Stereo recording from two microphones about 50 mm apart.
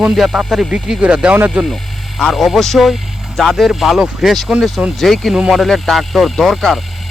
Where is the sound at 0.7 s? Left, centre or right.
Centre.